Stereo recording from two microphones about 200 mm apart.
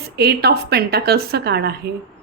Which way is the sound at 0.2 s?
55° right (ahead or behind).